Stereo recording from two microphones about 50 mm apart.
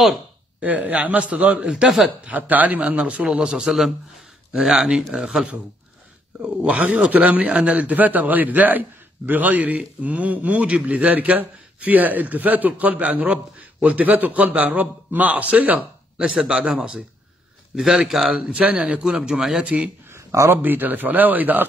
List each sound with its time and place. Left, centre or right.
0.6 s a man's voice: right
3.3 s speech: centre
6.4 s a man's voice: right
17.7 s a man's voice: centre
19.6 s a man's voice: right
20.1 s a sound: right
20.5 s a man's voice: right